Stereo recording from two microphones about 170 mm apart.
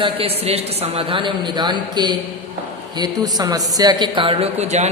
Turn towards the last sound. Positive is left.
turn(degrees=-40)  # may be behind; listen again after turning